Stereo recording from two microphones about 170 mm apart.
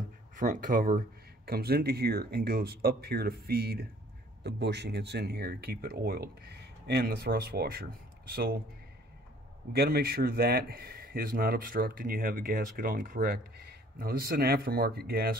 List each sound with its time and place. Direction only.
0.4 s speech: 50° right (ahead or behind)
4.4 s speech: 80° right; by 7.8 s 65° right (ahead or behind)
9.7 s speech: 65° right (ahead or behind)